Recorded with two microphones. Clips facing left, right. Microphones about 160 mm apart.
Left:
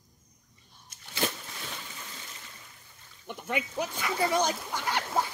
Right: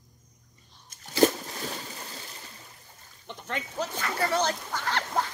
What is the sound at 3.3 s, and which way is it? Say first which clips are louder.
Speech: left 3 dB; 10° left (ahead or behind).